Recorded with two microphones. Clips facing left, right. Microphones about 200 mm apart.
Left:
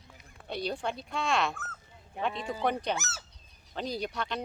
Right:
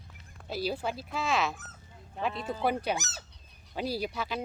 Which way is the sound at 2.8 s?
15° right (ahead or behind).